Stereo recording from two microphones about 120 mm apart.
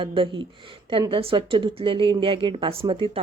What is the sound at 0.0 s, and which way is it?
A woman's voice, 45° right (ahead or behind).